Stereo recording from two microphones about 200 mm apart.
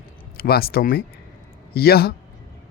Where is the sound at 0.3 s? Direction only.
50° left (ahead or behind).